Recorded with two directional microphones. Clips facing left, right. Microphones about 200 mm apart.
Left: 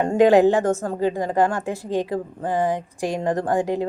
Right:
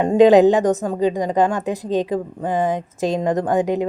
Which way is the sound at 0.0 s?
15° right (ahead or behind).